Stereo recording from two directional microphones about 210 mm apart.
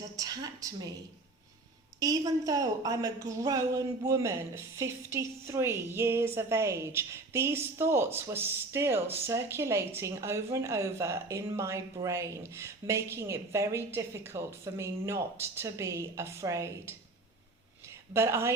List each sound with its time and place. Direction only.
0.2 s a woman's voice: 15° right (ahead or behind)
2.0 s a woman's voice: 15° right (ahead or behind)
17.8 s a sound: 10° right (ahead or behind)